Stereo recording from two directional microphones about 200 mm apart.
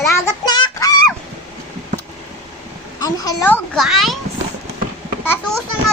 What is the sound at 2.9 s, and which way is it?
A child's voice, 20° left (ahead or behind).